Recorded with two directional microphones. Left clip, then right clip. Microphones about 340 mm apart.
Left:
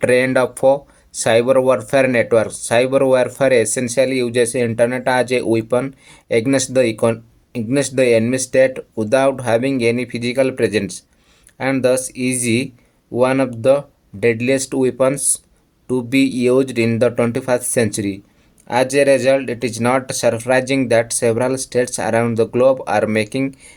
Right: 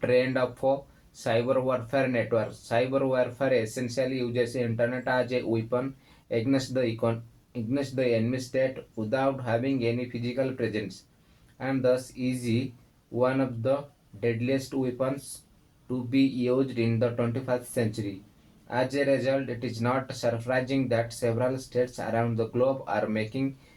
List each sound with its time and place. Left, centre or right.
0.0 s speech: right